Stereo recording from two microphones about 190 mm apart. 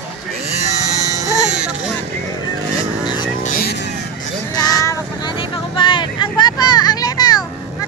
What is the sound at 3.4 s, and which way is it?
Vehicle, 50° left (ahead or behind).